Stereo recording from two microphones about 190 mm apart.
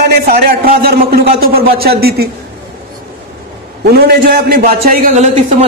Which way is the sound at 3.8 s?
55° right (ahead or behind).